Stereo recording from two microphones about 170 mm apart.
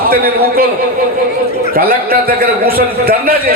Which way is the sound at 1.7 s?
65° right (ahead or behind).